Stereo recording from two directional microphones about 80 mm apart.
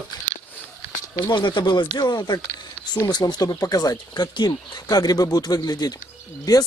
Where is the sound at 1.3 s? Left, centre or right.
Left.